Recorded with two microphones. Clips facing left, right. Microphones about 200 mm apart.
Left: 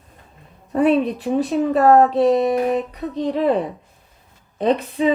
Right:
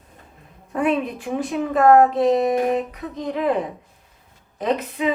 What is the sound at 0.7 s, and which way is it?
Speech, 35° left (ahead or behind).